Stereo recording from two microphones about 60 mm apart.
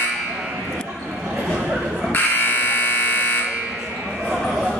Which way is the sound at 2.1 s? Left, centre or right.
Left.